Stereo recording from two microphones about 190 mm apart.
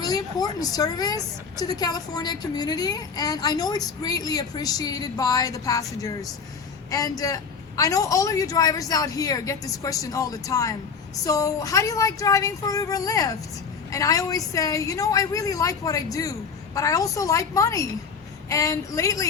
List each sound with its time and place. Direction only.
0.0 s a woman's voice: 20° left (ahead or behind)